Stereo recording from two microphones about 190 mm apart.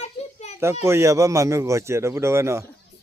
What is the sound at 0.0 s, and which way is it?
Children playing, 35° left (ahead or behind).